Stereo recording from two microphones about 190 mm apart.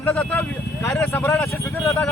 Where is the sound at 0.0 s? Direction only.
10° left (ahead or behind).